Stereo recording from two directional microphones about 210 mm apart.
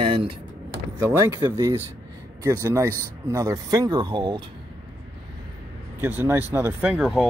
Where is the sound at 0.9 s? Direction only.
15° right (ahead or behind).